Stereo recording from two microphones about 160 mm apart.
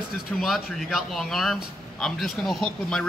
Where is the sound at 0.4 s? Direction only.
Centre (ahead or behind).